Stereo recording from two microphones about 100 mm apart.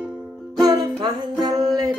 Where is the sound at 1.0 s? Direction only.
40° right (ahead or behind).